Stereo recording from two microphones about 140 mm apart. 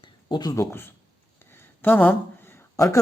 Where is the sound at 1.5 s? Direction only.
15° left (ahead or behind).